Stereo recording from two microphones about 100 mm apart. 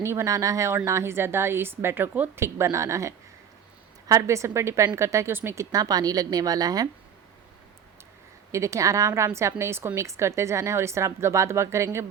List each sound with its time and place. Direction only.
0.0 s a woman's voice: 25° right (ahead or behind)
5.7 s a woman's voice: 40° right (ahead or behind)
8.5 s a woman's voice: 30° right (ahead or behind)